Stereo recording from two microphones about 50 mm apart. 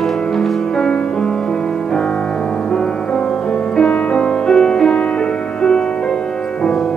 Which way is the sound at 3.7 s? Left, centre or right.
Centre.